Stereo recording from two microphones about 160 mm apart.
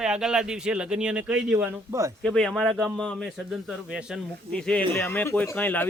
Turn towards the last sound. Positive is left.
turn(degrees=10)  # may be behind; listen again after turning